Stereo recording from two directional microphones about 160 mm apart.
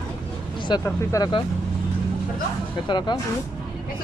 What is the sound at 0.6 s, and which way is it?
Speech, 25° left (ahead or behind).